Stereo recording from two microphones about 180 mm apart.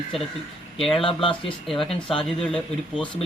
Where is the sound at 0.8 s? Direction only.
Centre (ahead or behind).